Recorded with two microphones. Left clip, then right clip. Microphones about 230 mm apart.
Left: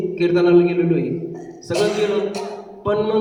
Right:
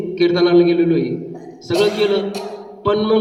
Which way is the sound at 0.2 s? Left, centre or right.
Right.